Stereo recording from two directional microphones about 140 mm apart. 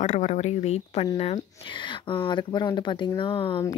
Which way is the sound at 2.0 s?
35° left (ahead or behind).